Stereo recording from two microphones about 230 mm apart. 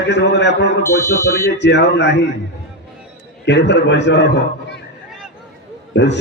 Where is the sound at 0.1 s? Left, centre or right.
Left.